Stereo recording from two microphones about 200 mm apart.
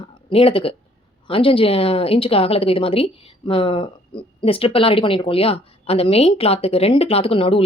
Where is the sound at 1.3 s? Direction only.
25° left (ahead or behind).